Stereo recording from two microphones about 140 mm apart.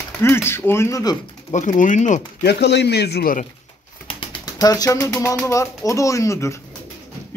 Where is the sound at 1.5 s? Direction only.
60° left (ahead or behind).